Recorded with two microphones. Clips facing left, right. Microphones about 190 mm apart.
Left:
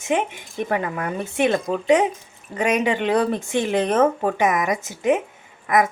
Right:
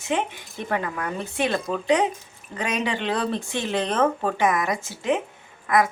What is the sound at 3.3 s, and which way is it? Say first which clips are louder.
Speech: left 5 dB; 15° left (ahead or behind).